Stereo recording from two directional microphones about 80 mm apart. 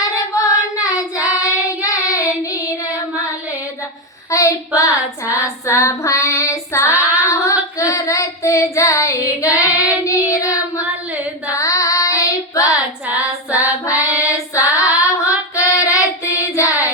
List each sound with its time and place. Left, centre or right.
0.3 s child singing: left
4.3 s child singing: left
13.1 s female singing: centre
13.8 s child singing: left